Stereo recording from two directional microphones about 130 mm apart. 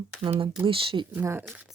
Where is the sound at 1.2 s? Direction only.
15° right (ahead or behind).